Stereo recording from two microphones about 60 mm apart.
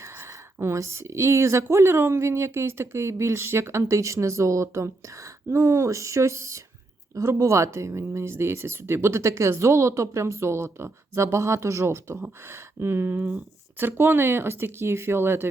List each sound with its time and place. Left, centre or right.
0.0 s speech: right